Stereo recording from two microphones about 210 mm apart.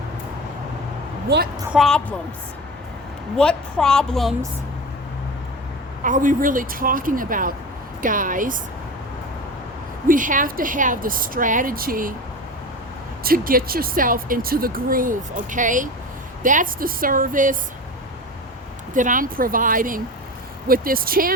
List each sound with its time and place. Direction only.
1.7 s a woman's voice: centre (ahead or behind)
3.3 s a woman's voice: 5° left (ahead or behind)
6.0 s a woman's voice: 40° right (ahead or behind)
10.1 s a woman's voice: 40° right (ahead or behind)
13.2 s a woman's voice: 45° right (ahead or behind)
18.9 s a woman's voice: 40° right (ahead or behind)